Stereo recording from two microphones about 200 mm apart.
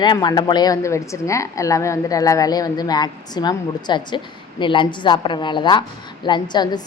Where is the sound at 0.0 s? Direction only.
20° left (ahead or behind).